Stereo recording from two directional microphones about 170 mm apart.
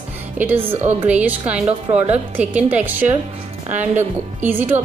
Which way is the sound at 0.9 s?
10° right (ahead or behind).